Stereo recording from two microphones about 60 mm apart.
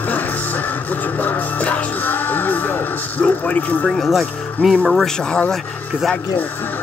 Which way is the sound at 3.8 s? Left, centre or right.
Centre.